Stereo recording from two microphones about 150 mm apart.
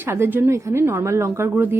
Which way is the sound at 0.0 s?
15° right (ahead or behind).